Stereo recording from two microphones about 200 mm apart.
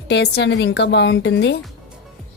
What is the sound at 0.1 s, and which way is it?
A woman's voice, 60° left (ahead or behind).